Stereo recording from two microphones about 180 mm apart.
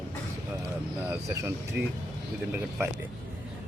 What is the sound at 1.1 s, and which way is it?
Speech, 15° right (ahead or behind).